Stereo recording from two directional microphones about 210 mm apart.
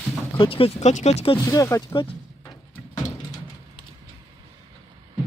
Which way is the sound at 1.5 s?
15° left (ahead or behind).